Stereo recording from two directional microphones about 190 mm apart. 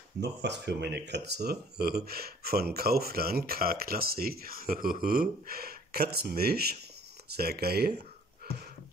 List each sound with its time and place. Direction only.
0.2 s speech: 65° right (ahead or behind)